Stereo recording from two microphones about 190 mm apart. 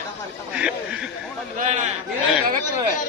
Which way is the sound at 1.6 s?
40° right (ahead or behind).